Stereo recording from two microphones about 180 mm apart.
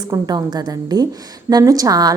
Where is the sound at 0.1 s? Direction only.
20° right (ahead or behind).